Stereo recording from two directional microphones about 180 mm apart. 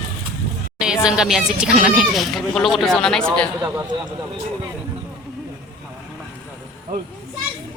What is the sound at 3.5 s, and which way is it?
Speech, 15° right (ahead or behind).